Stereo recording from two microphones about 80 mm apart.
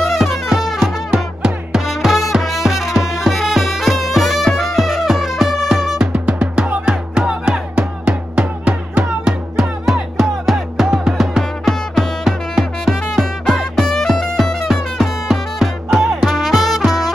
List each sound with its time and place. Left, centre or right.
0.0 s music: centre; by 9.7 s right
10.2 s music: centre